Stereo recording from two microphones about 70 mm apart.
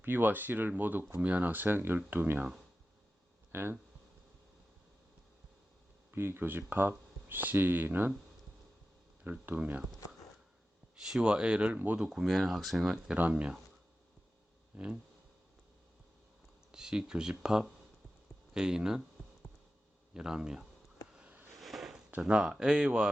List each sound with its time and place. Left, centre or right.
0.0 s speech: right
3.5 s speech: right
6.1 s speech: right
9.2 s speech: right
10.9 s speech: centre
13.1 s speech: right
14.7 s speech: centre
16.7 s speech: centre
20.1 s speech: centre
21.1 s a sound: centre
21.6 s a sound: centre
22.2 s speech: centre